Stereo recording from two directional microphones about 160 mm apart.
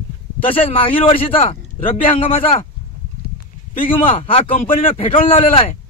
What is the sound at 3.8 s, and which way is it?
Speech, 35° left (ahead or behind).